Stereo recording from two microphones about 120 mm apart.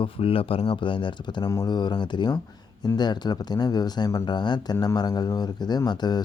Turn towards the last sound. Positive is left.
turn(degrees=35)  # may be behind; listen again after turning